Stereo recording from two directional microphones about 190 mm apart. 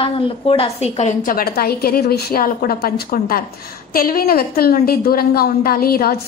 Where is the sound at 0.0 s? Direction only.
30° left (ahead or behind).